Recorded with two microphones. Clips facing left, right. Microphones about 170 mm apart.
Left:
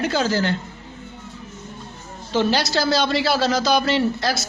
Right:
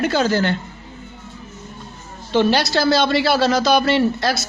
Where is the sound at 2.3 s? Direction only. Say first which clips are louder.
Right 3 dB; 65° right (ahead or behind).